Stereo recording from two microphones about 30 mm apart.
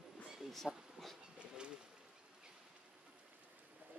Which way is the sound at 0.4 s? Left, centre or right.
Centre.